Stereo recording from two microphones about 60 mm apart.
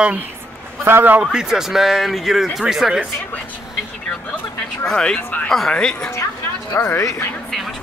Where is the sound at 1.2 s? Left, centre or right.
Centre.